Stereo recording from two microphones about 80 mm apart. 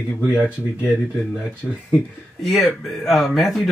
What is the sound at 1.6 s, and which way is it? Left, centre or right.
Speech, centre.